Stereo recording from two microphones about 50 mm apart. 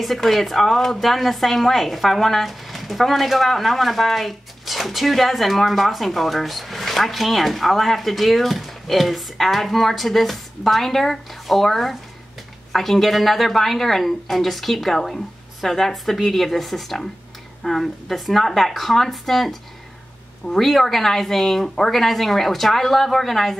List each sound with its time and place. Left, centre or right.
0.0 s a woman's voice: centre